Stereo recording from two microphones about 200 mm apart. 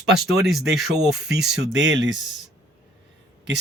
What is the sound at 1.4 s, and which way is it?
Speech, 55° right (ahead or behind).